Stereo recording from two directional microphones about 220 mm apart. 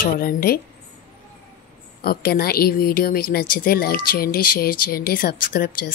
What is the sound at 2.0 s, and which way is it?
A woman's voice, 45° left (ahead or behind).